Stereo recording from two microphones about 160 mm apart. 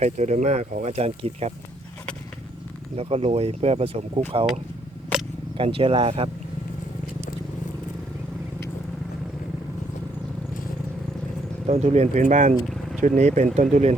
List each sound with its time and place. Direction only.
0.0 s speech: 45° right (ahead or behind)
2.9 s speech: 40° right (ahead or behind)
5.5 s speech: 35° right (ahead or behind)
11.6 s speech: 45° right (ahead or behind)